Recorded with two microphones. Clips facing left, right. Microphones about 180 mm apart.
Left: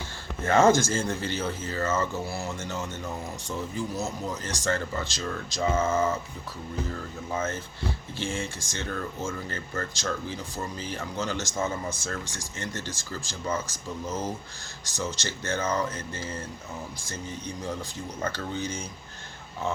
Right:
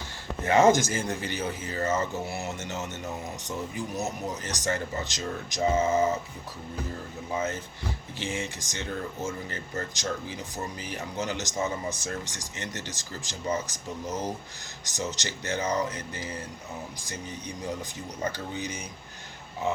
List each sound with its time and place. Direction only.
0.4 s speech: 15° right (ahead or behind)
7.3 s speech: 15° right (ahead or behind)